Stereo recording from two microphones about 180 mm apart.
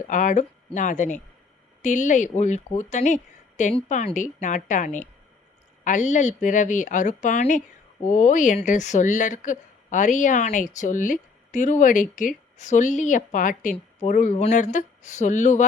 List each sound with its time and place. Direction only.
0.1 s speech: 45° left (ahead or behind)